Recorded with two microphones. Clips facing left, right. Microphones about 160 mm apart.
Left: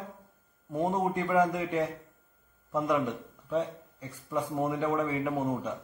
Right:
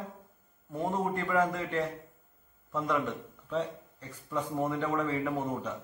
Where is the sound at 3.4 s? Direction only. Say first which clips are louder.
Left 2 dB; 10° left (ahead or behind).